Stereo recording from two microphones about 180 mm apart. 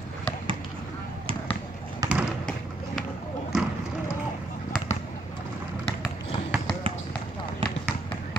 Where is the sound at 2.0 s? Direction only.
20° right (ahead or behind).